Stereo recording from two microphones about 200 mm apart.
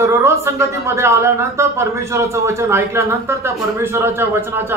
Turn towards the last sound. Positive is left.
turn(degrees=-10)  # may be behind; listen again after turning